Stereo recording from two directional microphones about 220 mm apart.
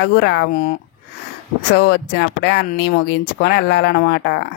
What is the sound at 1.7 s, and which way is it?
A woman's voice, 50° left (ahead or behind).